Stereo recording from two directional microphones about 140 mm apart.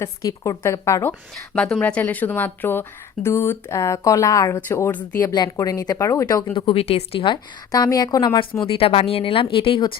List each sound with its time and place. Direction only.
0.0 s speech: 25° left (ahead or behind)
1.5 s speech: 5° left (ahead or behind)
5.2 s speech: 30° left (ahead or behind)
6.5 s speech: 40° left (ahead or behind)
7.7 s speech: 25° left (ahead or behind)
8.6 s speech: 40° left (ahead or behind)